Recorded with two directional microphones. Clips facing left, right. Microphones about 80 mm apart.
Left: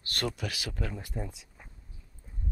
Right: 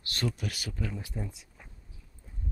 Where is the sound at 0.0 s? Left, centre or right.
Left.